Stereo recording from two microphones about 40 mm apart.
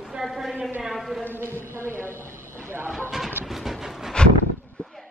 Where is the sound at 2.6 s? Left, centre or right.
Right.